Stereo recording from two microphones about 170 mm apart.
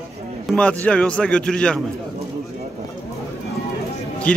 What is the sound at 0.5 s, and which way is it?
A man's voice, 5° left (ahead or behind).